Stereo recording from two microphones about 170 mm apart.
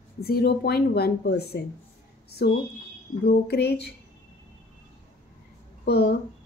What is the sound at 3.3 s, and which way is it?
Speech, 70° left (ahead or behind).